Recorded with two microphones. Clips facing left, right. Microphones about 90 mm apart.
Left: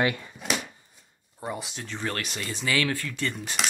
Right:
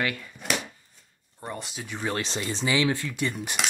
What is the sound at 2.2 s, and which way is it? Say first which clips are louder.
Speech: right 4 dB; 25° right (ahead or behind).